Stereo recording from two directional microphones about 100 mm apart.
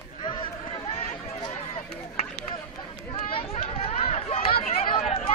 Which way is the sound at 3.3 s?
80° left.